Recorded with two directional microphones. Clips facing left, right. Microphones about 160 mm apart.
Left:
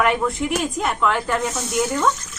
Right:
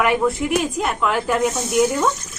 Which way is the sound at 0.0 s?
5° right (ahead or behind).